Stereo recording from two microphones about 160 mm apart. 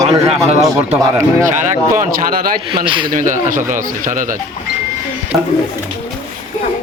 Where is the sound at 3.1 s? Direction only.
55° right (ahead or behind).